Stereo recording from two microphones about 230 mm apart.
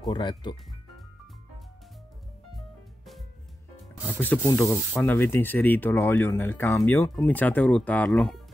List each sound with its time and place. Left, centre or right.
0.1 s speech: centre
4.0 s speech: centre